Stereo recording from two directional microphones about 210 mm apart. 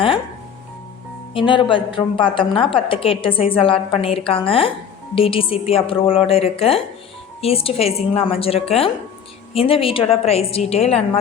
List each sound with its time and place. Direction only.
1.3 s a woman's voice: 25° left (ahead or behind)